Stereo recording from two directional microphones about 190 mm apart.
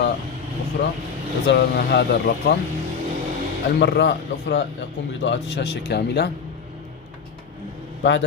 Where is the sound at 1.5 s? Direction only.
60° left (ahead or behind).